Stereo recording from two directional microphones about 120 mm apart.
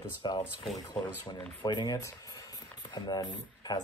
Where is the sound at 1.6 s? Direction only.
35° left (ahead or behind).